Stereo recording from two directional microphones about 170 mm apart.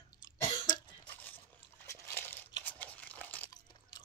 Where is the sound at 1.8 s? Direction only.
10° left (ahead or behind).